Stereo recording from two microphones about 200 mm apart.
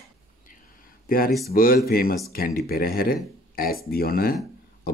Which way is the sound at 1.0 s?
45° left (ahead or behind).